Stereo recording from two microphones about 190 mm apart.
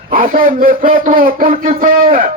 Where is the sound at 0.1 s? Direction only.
50° right (ahead or behind).